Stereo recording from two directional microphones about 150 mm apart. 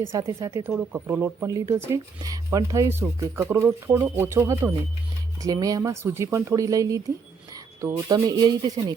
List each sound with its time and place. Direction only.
0.1 s speech: 20° right (ahead or behind)